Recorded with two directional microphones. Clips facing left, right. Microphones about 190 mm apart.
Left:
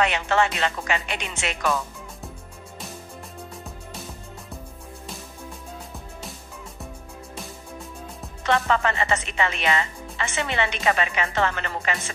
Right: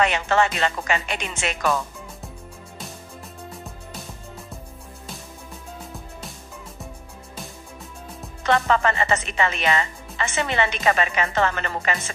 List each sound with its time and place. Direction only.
0.0 s speech: 45° right (ahead or behind)
8.5 s speech: 45° right (ahead or behind)